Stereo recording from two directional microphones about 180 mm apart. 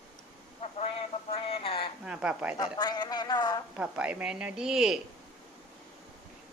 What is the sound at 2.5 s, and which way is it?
Speech, 20° left (ahead or behind).